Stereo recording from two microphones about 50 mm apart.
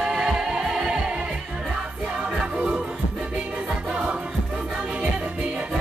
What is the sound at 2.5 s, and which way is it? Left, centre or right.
Music, right.